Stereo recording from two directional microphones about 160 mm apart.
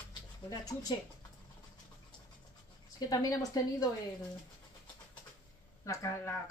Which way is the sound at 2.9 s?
25° left (ahead or behind).